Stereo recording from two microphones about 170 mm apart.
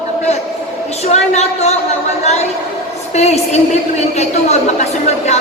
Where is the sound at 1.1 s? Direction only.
40° left (ahead or behind).